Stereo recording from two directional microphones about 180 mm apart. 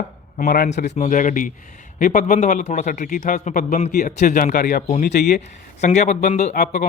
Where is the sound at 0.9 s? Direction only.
45° left (ahead or behind); by 5.4 s 60° left (ahead or behind).